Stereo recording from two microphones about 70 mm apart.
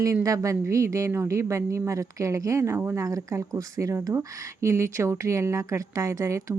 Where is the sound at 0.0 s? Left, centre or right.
Right.